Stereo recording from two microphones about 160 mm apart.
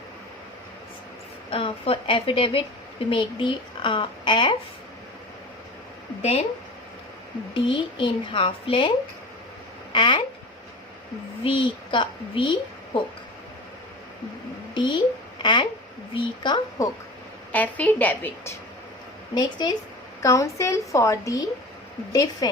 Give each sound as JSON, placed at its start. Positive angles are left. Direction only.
{"t": 1.5, "sound": "a woman's voice", "side_deg": 35}
{"t": 7.5, "sound": "a woman's voice", "side_deg": 30}
{"t": 9.9, "sound": "speech", "side_deg": 30}
{"t": 11.4, "sound": "a woman's voice", "side_deg": 30}
{"t": 14.8, "sound": "a sound", "side_deg": 30}
{"t": 16.1, "sound": "a woman's voice", "side_deg": 30}
{"t": 17.5, "sound": "a woman's voice", "side_deg": 10}
{"t": 19.3, "sound": "a woman's voice", "side_deg": 25}